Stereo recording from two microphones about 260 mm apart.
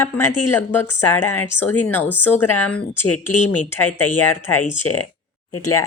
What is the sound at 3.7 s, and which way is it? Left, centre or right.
Speech, centre.